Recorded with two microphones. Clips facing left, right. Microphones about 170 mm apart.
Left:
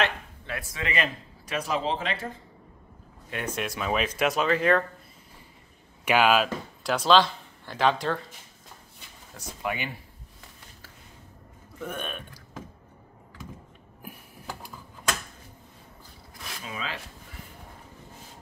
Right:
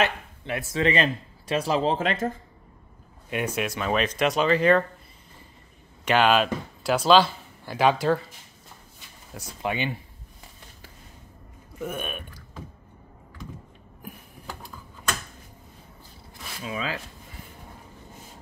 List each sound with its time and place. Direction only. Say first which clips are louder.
0.5 s speech: right 9 dB; 25° right (ahead or behind)
2.0 s speech: right 6 dB; 45° right (ahead or behind)
3.3 s speech: right 4 dB; 10° right (ahead or behind)
6.0 s speech: right 1 dB; 5° left (ahead or behind); by 8.2 s 10° right (ahead or behind)
9.6 s speech: right 3 dB; 25° right (ahead or behind)
11.8 s speech: right 3 dB; 10° right (ahead or behind)
16.6 s rub: right 6 dB; 40° right (ahead or behind)